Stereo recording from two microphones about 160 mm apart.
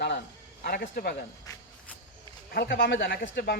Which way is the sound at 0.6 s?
70° left (ahead or behind).